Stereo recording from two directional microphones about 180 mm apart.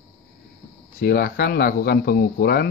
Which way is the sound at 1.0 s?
55° left (ahead or behind).